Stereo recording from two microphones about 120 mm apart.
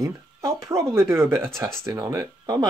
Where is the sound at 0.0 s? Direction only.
25° right (ahead or behind).